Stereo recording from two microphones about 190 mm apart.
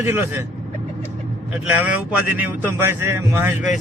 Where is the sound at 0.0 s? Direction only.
10° right (ahead or behind).